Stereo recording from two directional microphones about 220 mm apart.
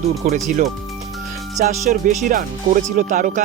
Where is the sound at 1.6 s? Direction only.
35° right (ahead or behind).